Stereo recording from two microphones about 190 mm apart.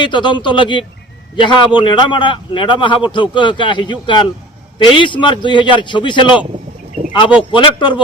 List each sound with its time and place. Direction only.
0.0 s a man's voice: 25° left (ahead or behind)
7.5 s a man's voice: 25° left (ahead or behind)